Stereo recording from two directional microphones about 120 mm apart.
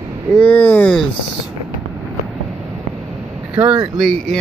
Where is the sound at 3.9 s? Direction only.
Centre (ahead or behind).